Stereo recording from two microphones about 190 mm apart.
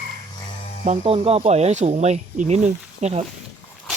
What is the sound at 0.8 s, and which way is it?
Speech, 30° right (ahead or behind).